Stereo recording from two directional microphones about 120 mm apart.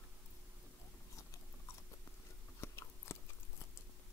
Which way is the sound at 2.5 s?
20° left (ahead or behind).